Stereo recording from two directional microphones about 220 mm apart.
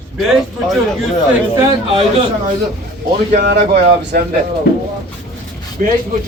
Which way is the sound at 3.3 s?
50° right (ahead or behind).